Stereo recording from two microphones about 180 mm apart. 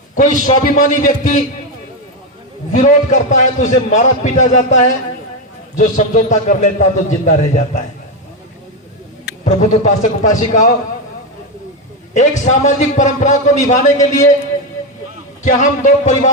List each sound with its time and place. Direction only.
0.2 s a man's voice: 45° left (ahead or behind)
2.7 s a man's voice: 45° left (ahead or behind)
9.4 s a man's voice: 45° left (ahead or behind)
12.1 s a man's voice: 40° left (ahead or behind)
15.4 s a man's voice: 45° left (ahead or behind)